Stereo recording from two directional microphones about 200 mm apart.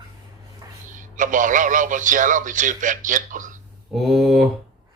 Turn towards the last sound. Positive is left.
turn(degrees=0)  # may be behind; listen again after turning